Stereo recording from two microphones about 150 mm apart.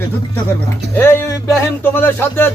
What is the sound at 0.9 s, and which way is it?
Speech, 15° left (ahead or behind).